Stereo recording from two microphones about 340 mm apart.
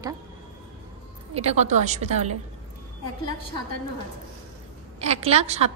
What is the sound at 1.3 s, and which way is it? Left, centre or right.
A woman's voice, centre.